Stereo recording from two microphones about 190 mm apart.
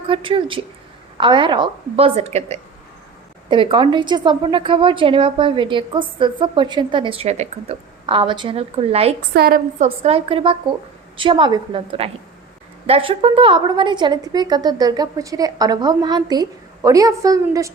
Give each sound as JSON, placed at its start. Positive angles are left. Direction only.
{"t": 0.1, "sound": "a woman's voice", "side_deg": -25}
{"t": 9.3, "sound": "a woman's voice", "side_deg": -55}
{"t": 9.7, "sound": "a woman's voice", "side_deg": -35}